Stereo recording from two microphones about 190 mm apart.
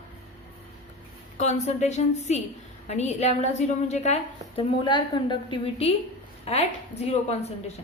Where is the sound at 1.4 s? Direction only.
35° left (ahead or behind).